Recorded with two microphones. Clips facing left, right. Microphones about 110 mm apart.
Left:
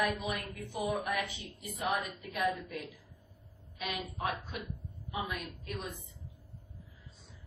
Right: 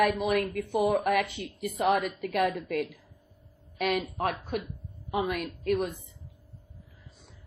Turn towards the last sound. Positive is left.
turn(degrees=-60)  # may be behind; listen again after turning